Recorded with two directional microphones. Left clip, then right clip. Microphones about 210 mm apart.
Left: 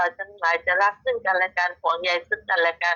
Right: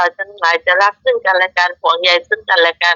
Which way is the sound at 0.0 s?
55° right (ahead or behind).